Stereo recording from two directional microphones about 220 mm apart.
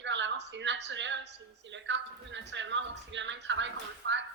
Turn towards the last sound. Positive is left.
turn(degrees=-55)  # may be behind; listen again after turning